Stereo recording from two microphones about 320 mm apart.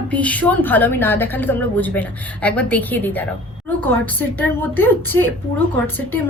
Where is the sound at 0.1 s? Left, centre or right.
Centre.